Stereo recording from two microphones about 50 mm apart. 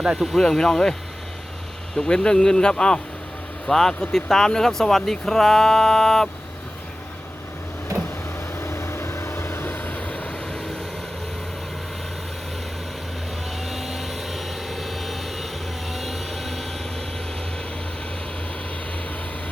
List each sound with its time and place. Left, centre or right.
0.2 s speech: centre
0.4 s speech: centre
2.0 s speech: centre
8.5 s vehicle: left
9.8 s vehicle: left
13.6 s vehicle: centre